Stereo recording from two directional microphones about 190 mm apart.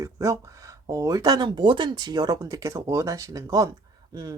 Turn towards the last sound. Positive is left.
turn(degrees=-20)  # may be behind; listen again after turning